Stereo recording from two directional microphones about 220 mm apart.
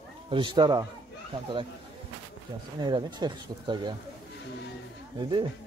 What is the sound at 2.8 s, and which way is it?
Speech, 20° right (ahead or behind).